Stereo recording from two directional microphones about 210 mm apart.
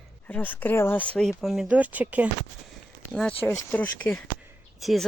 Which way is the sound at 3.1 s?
5° left (ahead or behind).